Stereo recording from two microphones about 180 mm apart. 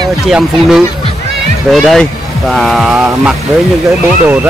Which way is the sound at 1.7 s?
Centre (ahead or behind).